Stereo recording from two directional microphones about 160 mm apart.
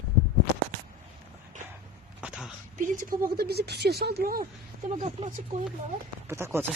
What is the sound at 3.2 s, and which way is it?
Speech, 80° right.